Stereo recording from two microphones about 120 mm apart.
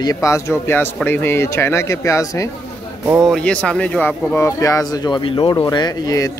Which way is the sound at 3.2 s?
5° left (ahead or behind).